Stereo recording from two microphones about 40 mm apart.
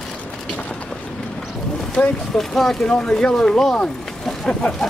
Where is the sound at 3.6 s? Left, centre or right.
Centre.